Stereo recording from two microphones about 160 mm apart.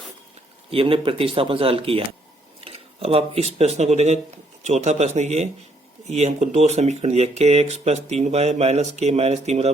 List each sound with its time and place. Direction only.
0.7 s speech: 35° right (ahead or behind)